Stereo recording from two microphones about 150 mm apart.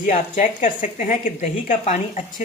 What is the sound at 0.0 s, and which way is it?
A woman's voice, 55° left (ahead or behind).